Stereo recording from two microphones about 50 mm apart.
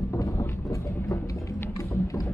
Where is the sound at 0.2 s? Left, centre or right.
Left.